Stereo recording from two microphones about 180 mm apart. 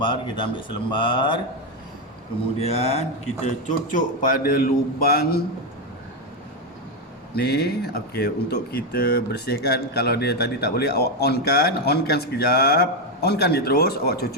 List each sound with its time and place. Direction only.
0.0 s speech: 25° left (ahead or behind)
2.6 s speech: 35° left (ahead or behind)
3.4 s a man's voice: 45° left (ahead or behind)
7.3 s speech: 60° left (ahead or behind)